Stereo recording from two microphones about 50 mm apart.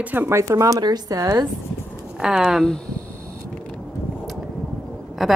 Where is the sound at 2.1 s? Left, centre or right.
Centre.